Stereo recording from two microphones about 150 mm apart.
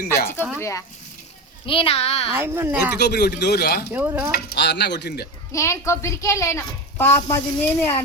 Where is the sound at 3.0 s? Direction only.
90° left.